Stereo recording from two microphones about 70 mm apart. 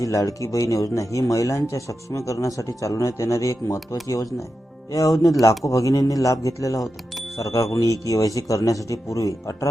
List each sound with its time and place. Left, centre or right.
0.0 s a man's voice: left
4.9 s a man's voice: left